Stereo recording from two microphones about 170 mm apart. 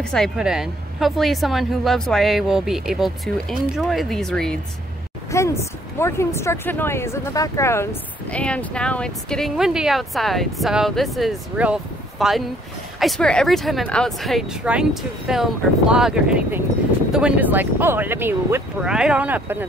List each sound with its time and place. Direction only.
0.0 s a woman's voice: 5° left (ahead or behind)
5.3 s a woman's voice: 15° left (ahead or behind); by 19.6 s 10° right (ahead or behind)